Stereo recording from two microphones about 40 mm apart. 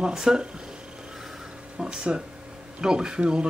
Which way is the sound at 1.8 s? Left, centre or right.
Right.